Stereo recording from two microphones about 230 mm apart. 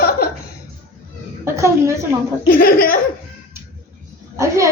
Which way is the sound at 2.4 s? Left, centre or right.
Left.